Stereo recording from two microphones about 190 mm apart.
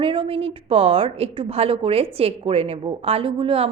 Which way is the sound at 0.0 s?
25° right (ahead or behind).